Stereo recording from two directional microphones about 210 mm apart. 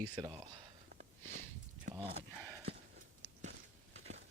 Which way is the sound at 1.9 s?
30° right (ahead or behind).